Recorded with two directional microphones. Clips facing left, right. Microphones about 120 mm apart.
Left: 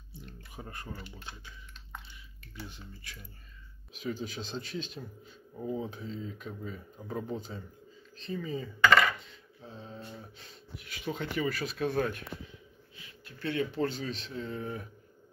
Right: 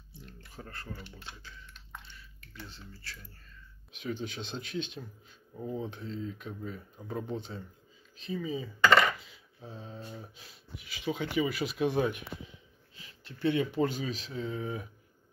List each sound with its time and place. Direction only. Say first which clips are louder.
0.6 s speech: left 1 dB; 15° left (ahead or behind)
3.9 s speech: even; centre (ahead or behind)
9.6 s a sound: right 1 dB; 15° right (ahead or behind)
9.8 s speech: right 1 dB; 5° right (ahead or behind)